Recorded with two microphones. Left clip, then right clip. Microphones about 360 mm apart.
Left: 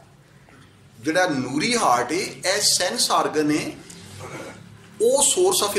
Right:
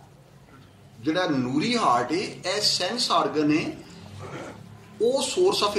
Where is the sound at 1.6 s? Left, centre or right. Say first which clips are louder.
Left 3 dB; left.